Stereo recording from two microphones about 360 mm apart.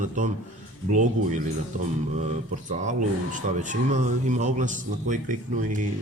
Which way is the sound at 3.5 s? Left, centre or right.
Right.